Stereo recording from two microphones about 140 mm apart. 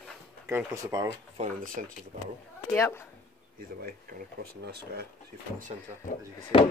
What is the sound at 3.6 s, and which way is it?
Speech, 90° right.